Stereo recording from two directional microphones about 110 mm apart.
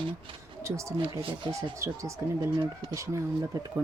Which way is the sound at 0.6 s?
25° right (ahead or behind).